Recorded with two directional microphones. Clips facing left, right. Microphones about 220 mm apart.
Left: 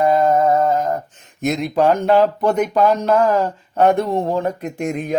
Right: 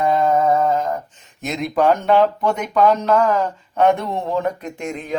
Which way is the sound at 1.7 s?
30° left (ahead or behind).